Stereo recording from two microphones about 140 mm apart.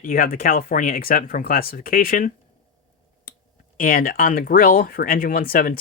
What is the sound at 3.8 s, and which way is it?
Speech, 90° left.